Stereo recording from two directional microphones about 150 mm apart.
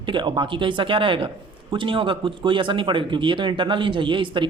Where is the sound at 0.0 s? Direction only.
35° right (ahead or behind).